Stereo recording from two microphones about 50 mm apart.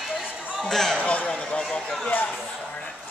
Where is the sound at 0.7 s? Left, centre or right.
Centre.